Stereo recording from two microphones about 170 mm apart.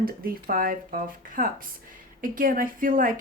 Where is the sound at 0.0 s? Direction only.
60° right (ahead or behind).